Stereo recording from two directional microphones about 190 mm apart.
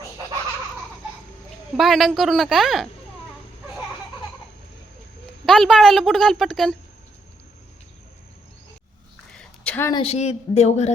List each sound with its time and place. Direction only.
1.7 s a woman's voice: centre (ahead or behind)
5.5 s a woman's voice: centre (ahead or behind)
9.3 s a sound: 5° left (ahead or behind)
9.9 s speech: 30° left (ahead or behind)